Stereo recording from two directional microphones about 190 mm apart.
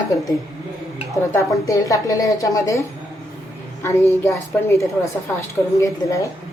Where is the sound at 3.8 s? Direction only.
15° left (ahead or behind).